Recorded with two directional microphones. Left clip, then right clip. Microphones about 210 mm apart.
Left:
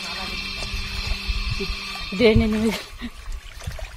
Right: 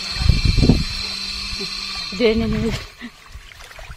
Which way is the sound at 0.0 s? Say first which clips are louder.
Right 4 dB; 55° right (ahead or behind).